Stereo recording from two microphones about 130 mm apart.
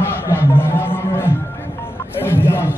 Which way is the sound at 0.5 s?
15° left (ahead or behind).